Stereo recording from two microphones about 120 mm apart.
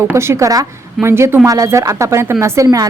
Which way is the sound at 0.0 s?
20° right (ahead or behind).